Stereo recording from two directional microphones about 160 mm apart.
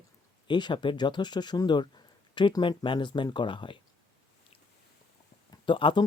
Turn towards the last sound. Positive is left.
turn(degrees=30)  # may be behind; listen again after turning